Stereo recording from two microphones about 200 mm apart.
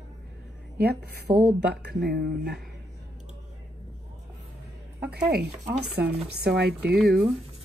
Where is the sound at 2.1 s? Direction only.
50° right (ahead or behind).